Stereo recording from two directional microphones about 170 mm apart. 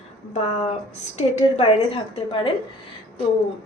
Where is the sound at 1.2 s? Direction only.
40° left (ahead or behind).